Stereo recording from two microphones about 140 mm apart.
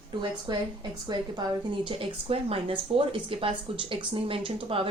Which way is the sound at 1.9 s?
40° right (ahead or behind).